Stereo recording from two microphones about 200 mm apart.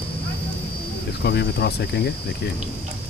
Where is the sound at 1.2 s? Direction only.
55° left (ahead or behind).